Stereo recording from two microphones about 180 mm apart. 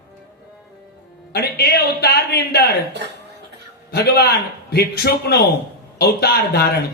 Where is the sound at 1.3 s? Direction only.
65° left (ahead or behind).